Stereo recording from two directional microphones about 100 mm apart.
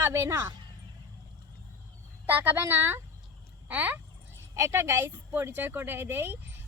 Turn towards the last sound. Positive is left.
turn(degrees=-25)  # may be behind; listen again after turning